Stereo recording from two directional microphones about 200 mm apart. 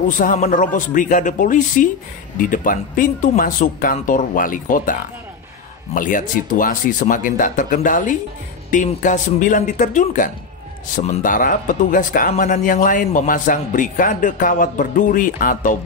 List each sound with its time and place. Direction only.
0.1 s speech: 40° left (ahead or behind)
5.9 s speech: 40° left (ahead or behind)